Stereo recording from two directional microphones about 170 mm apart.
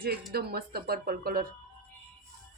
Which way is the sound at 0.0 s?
65° right (ahead or behind).